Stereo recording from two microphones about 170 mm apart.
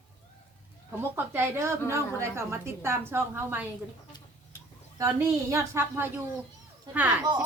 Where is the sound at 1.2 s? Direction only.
15° right (ahead or behind).